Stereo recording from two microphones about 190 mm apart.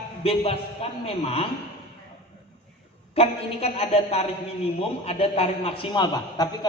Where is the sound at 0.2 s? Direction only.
30° left (ahead or behind).